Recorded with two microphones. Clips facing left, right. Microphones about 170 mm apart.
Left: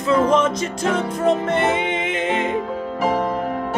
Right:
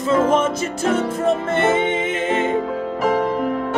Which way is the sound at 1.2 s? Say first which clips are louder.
Left 3 dB; 5° right (ahead or behind).